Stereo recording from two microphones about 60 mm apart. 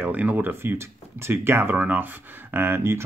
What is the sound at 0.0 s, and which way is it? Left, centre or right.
Speech, right.